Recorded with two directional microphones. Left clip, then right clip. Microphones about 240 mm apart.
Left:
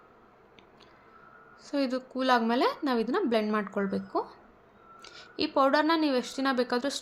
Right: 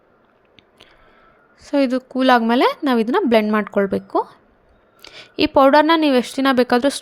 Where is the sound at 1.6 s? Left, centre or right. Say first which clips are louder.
Right 12 dB; right.